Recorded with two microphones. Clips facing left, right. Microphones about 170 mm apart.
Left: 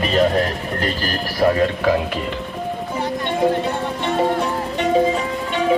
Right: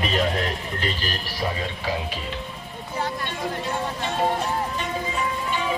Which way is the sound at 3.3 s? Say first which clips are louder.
Left 10 dB; 65° left (ahead or behind).